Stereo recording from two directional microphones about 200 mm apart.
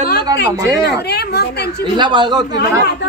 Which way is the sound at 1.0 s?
55° left (ahead or behind).